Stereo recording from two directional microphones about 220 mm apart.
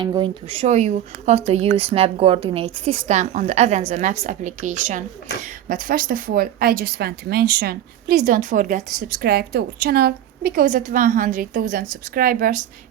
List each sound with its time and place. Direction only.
0.0 s a woman's voice: 20° right (ahead or behind); by 12.6 s 35° right (ahead or behind)